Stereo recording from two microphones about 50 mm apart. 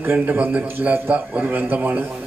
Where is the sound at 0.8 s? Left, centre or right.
Right.